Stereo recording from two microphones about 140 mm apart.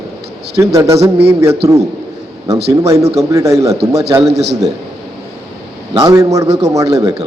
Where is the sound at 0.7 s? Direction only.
20° right (ahead or behind).